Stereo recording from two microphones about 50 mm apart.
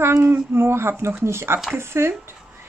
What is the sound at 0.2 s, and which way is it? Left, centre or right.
Speech, right.